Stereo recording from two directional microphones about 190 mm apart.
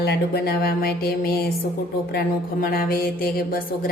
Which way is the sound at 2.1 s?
50° left (ahead or behind).